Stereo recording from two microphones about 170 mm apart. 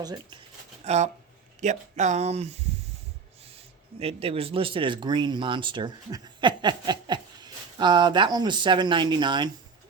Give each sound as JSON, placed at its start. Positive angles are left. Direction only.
{"t": 0.0, "sound": "speech", "side_deg": -25}
{"t": 0.9, "sound": "speech", "side_deg": -40}
{"t": 4.0, "sound": "speech", "side_deg": -35}